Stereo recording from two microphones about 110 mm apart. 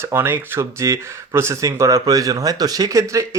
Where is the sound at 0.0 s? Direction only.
20° right (ahead or behind).